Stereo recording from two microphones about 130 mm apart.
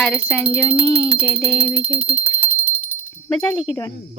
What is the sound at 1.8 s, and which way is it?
Speech, 50° right (ahead or behind).